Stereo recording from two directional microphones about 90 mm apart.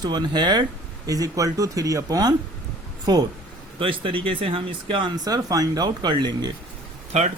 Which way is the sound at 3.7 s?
75° right (ahead or behind).